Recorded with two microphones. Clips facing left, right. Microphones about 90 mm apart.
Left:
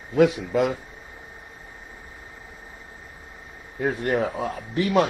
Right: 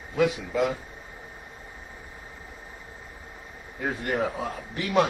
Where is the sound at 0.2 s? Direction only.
50° left (ahead or behind).